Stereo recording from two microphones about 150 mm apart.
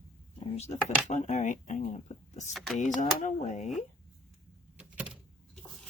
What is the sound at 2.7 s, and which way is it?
Speech, 55° left (ahead or behind).